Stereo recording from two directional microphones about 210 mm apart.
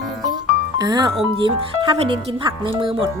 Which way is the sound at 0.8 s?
20° right (ahead or behind).